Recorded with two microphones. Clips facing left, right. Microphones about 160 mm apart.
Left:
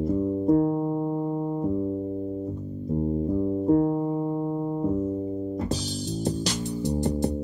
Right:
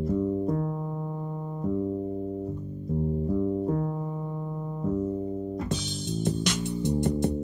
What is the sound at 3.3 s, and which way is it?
Music, 30° left (ahead or behind).